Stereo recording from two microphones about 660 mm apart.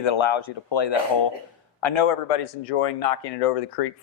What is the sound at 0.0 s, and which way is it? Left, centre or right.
Speech, left.